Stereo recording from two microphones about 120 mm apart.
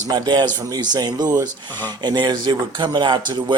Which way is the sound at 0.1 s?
35° right (ahead or behind).